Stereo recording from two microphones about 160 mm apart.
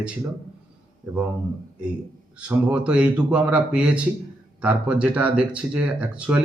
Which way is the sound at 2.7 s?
10° right (ahead or behind).